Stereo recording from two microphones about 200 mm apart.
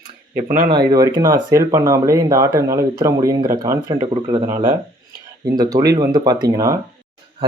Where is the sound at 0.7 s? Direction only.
20° right (ahead or behind).